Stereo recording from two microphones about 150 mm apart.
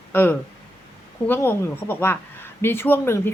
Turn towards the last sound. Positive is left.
turn(degrees=15)  # may be behind; listen again after turning